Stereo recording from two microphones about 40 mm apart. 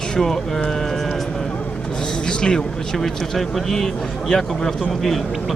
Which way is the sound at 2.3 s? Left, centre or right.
Left.